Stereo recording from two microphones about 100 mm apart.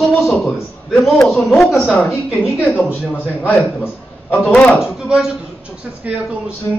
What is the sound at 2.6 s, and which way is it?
A man's voice, 15° left (ahead or behind).